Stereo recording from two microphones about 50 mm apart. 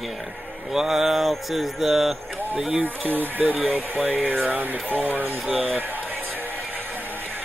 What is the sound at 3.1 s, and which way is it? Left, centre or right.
Speech, right.